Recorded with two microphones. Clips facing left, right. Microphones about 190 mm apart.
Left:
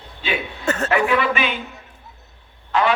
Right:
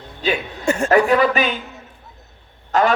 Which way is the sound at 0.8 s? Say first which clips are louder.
Right 5 dB; 40° right (ahead or behind).